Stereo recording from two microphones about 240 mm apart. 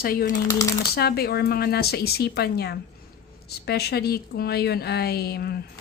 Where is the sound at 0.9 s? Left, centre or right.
Left.